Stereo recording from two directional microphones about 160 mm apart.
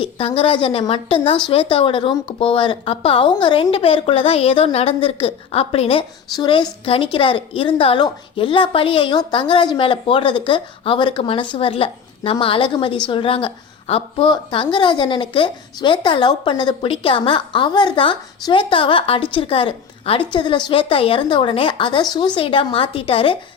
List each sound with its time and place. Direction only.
0.0 s a woman's voice: 35° left (ahead or behind)